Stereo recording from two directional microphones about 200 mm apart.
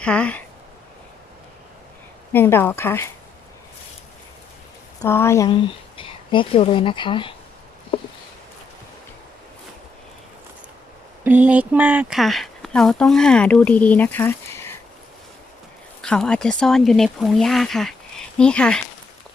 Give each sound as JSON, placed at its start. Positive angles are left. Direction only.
{"t": 0.0, "sound": "speech", "side_deg": 5}
{"t": 2.3, "sound": "speech", "side_deg": 10}
{"t": 5.0, "sound": "speech", "side_deg": 15}
{"t": 6.0, "sound": "speech", "side_deg": 25}
{"t": 11.2, "sound": "speech", "side_deg": -10}
{"t": 16.0, "sound": "speech", "side_deg": 5}